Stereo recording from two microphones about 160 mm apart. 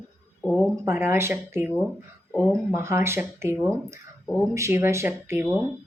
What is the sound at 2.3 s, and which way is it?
Speech, 15° left (ahead or behind).